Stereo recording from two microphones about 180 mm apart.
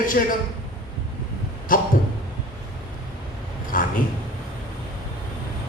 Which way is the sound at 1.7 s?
50° left (ahead or behind).